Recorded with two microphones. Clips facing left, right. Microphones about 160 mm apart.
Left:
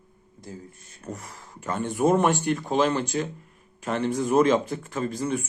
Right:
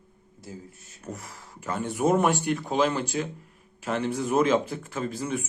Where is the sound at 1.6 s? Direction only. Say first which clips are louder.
Left 2 dB; 10° right (ahead or behind).